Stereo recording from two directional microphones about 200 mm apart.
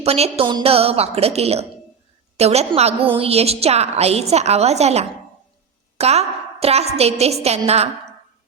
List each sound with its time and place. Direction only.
0.0 s a woman's voice: 30° right (ahead or behind)